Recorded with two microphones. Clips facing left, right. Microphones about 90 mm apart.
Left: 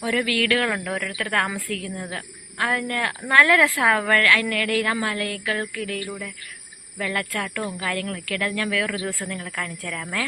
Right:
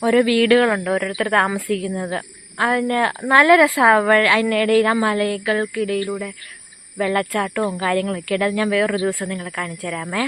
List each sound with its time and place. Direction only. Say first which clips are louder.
0.0 s a woman's voice: right 8 dB; 35° right (ahead or behind); by 1.9 s 20° right (ahead or behind)
1.9 s a woman's voice: right 8 dB; 35° right (ahead or behind)
3.3 s a woman's voice: right 5 dB; 15° right (ahead or behind)
4.5 s a woman's voice: right 8 dB; 30° right (ahead or behind)
6.0 s a woman's voice: right 8 dB; 30° right (ahead or behind)
7.6 s speech: right 9 dB; 40° right (ahead or behind)
7.9 s a woman's voice: right 8 dB; 25° right (ahead or behind)
9.3 s speech: right 4 dB; 10° right (ahead or behind)